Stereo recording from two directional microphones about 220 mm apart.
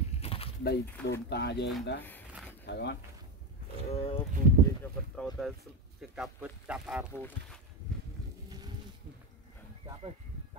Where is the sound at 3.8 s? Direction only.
25° left (ahead or behind).